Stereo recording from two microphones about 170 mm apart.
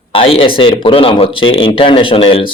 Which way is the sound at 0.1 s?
35° left (ahead or behind).